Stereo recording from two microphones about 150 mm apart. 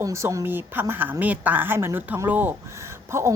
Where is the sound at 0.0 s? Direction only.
20° right (ahead or behind).